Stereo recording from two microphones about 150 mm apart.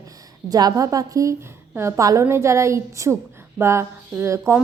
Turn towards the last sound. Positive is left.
turn(degrees=-20)  # may be behind; listen again after turning